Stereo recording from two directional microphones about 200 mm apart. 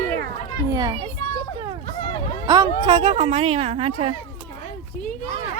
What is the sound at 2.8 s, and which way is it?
A woman's voice, 25° right (ahead or behind).